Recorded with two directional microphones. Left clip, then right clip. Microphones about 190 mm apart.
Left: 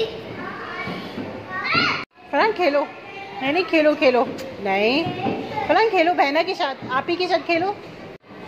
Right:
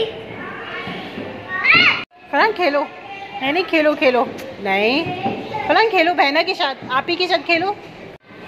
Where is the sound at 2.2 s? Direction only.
5° right (ahead or behind).